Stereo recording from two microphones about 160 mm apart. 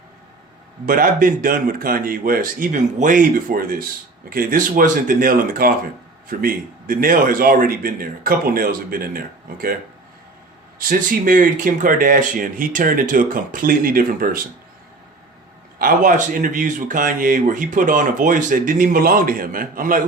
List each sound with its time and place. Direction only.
0.9 s speech: 60° right (ahead or behind)
10.8 s speech: 60° right (ahead or behind)
15.8 s speech: 55° right (ahead or behind)